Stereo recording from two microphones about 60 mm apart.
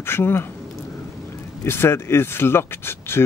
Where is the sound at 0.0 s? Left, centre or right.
Left.